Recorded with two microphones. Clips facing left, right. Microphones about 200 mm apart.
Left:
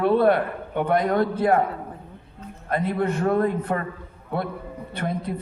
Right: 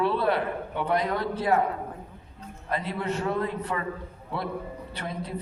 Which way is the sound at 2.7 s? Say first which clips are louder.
Left 6 dB; 50° left (ahead or behind).